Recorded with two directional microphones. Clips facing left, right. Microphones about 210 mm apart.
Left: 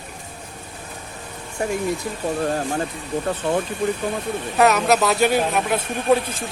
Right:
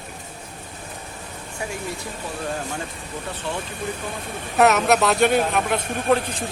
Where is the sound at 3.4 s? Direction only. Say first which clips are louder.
Left 8 dB; 45° left (ahead or behind).